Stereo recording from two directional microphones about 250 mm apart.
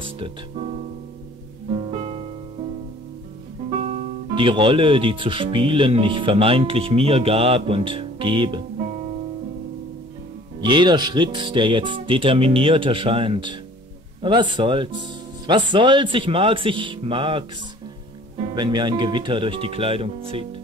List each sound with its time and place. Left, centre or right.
0.0 s speech: right
1.7 s music: right
3.8 s speech: right
10.6 s speech: centre